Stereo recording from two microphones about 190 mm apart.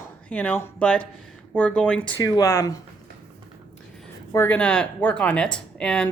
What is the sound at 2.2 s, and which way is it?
Speech, 20° left (ahead or behind).